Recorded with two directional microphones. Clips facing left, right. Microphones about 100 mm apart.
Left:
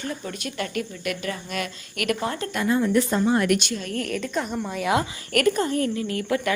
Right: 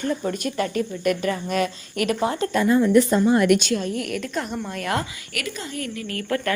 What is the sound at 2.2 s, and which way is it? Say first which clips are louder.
Speech: right 5 dB; 20° right (ahead or behind).